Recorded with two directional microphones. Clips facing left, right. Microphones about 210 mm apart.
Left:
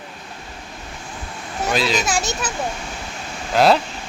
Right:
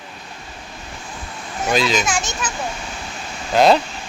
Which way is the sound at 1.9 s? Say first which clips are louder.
Even; 35° left (ahead or behind).